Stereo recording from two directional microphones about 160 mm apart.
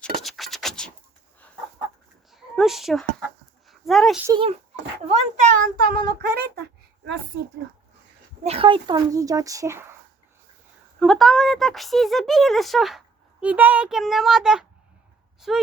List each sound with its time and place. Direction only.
0.2 s scratch: centre (ahead or behind)
2.3 s a sound: centre (ahead or behind)
4.3 s speech: 35° right (ahead or behind)
5.0 s speech: 45° right (ahead or behind)
6.1 s speech: 80° right
8.4 s a child's voice: 35° right (ahead or behind); by 9.9 s 15° right (ahead or behind)
11.0 s speech: centre (ahead or behind)